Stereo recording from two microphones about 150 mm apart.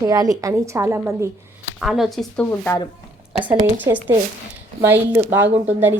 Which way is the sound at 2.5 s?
15° left (ahead or behind).